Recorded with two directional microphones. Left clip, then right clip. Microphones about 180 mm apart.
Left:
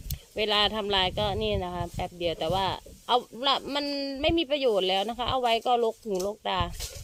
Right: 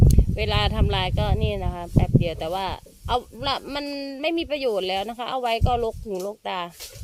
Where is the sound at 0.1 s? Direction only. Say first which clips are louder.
Right 1 dB; 5° right (ahead or behind).